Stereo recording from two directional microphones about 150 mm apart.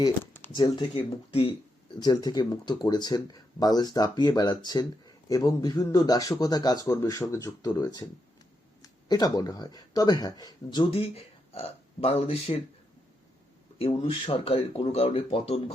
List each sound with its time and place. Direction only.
0.5 s speech: 30° left (ahead or behind)
2.0 s speech: 25° left (ahead or behind); by 12.5 s 40° left (ahead or behind)
13.7 s speech: 40° left (ahead or behind)